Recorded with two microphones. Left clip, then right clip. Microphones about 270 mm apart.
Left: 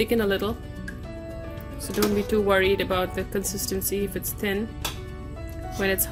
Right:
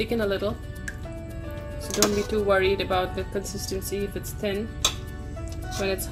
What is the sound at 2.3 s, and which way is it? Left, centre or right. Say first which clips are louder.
Speech: left 4 dB; left.